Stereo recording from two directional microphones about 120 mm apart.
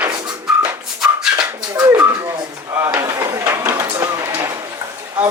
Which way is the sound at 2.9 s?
25° right (ahead or behind).